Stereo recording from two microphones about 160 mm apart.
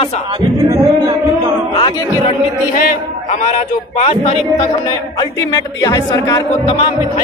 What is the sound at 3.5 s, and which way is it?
Speech, 45° left (ahead or behind).